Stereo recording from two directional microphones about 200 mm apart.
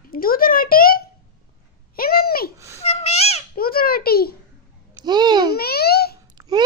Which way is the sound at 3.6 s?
50° left (ahead or behind).